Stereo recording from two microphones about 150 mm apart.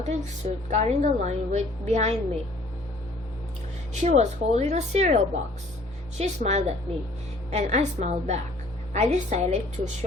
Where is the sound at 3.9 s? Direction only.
50° right (ahead or behind).